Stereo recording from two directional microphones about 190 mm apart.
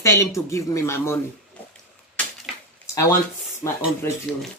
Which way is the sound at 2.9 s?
15° left (ahead or behind).